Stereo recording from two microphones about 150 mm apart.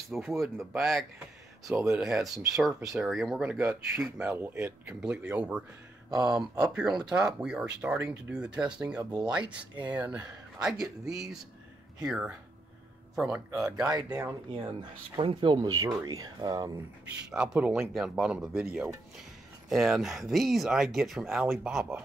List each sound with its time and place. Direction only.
0.4 s speech: centre (ahead or behind)
6.6 s speech: 5° right (ahead or behind)
13.8 s speech: 25° right (ahead or behind)
17.3 s speech: 5° right (ahead or behind)